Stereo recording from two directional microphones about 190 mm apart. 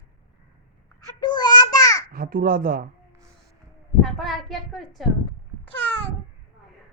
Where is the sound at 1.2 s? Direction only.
20° left (ahead or behind).